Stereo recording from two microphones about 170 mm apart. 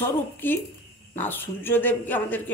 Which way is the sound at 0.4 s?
10° left (ahead or behind).